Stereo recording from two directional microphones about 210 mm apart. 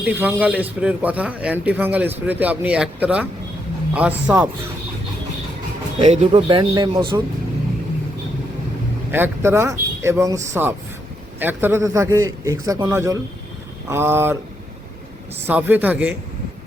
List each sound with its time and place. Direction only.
0.0 s speech: 10° right (ahead or behind)
6.0 s speech: 30° right (ahead or behind)
9.1 s speech: 10° right (ahead or behind)
15.4 s speech: 10° right (ahead or behind)